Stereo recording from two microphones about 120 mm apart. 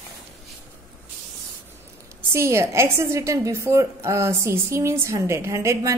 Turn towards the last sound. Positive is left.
turn(degrees=-25)  # may be behind; listen again after turning